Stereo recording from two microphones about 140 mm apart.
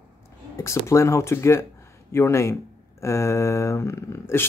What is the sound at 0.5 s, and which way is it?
Speech, 20° left (ahead or behind).